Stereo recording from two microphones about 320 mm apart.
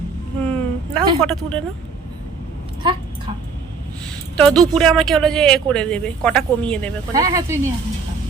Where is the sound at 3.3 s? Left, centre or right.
Centre.